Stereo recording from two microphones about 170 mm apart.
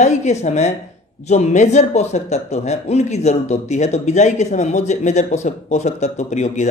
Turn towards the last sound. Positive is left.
turn(degrees=45)  # may be behind; listen again after turning